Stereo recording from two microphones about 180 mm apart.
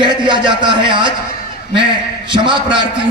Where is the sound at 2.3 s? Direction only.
25° right (ahead or behind).